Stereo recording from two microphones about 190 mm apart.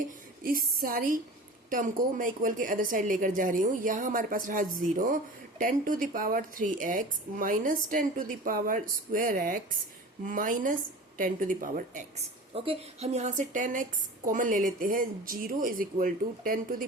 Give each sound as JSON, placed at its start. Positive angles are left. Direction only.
{"t": 0.0, "sound": "a woman's voice", "side_deg": -50}
{"t": 12.5, "sound": "a woman's voice", "side_deg": -30}